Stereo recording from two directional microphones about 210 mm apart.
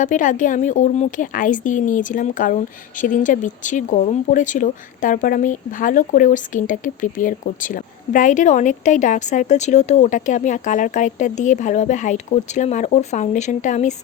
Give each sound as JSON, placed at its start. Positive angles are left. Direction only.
{"t": 0.0, "sound": "speech", "side_deg": 40}